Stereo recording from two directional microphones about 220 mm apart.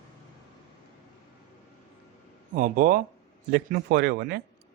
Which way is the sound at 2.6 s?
40° right (ahead or behind).